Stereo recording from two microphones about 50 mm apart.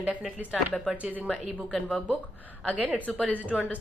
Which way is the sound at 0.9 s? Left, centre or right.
Right.